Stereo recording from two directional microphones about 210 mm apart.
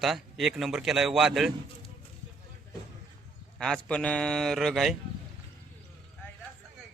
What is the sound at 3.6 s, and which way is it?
A man's voice, 5° left (ahead or behind).